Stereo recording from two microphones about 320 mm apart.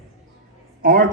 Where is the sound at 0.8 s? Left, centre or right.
Right.